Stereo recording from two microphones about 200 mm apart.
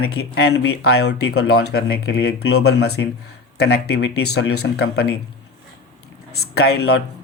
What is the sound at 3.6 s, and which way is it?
Speech, 55° left (ahead or behind).